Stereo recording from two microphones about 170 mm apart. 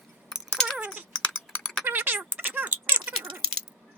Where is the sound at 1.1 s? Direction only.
5° left (ahead or behind).